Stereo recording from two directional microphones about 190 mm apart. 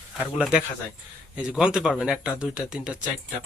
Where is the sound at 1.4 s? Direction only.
5° right (ahead or behind).